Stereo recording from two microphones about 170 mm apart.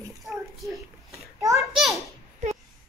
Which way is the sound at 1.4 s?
20° right (ahead or behind).